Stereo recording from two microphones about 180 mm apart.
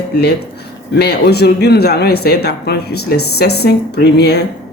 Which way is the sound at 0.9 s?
65° left (ahead or behind).